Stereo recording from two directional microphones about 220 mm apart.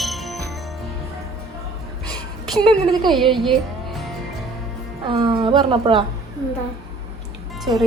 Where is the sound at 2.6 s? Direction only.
20° right (ahead or behind).